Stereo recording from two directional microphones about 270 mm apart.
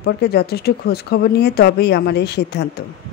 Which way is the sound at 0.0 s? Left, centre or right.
Left.